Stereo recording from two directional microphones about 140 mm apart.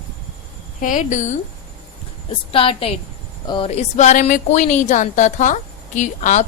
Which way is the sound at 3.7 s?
55° left (ahead or behind).